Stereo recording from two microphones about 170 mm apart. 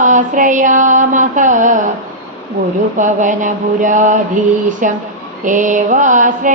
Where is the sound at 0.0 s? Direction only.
50° right (ahead or behind).